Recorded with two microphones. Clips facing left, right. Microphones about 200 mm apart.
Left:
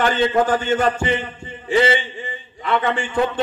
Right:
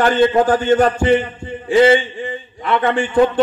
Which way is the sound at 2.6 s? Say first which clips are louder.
Right 4 dB; 50° right (ahead or behind).